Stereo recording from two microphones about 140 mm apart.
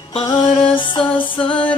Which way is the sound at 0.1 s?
30° left (ahead or behind).